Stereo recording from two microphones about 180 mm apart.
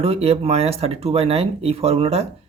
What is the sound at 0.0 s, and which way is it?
Speech, 35° right (ahead or behind).